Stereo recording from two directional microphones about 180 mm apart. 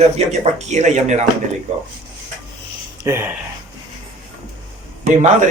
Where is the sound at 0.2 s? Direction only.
35° right (ahead or behind).